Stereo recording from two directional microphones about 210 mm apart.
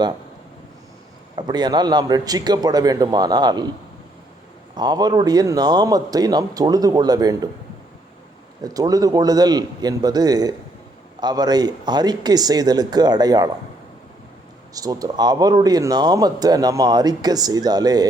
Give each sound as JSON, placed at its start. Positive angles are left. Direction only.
{"t": 1.4, "sound": "speech", "side_deg": -20}
{"t": 4.7, "sound": "a man's voice", "side_deg": -20}
{"t": 8.6, "sound": "a man's voice", "side_deg": -15}
{"t": 14.7, "sound": "speech", "side_deg": -15}